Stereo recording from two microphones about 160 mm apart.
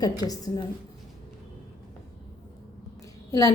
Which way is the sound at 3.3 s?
20° left (ahead or behind).